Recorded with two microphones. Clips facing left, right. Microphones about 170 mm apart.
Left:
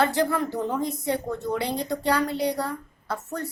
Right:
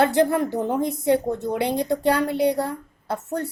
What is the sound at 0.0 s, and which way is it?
A woman's voice, 55° right (ahead or behind).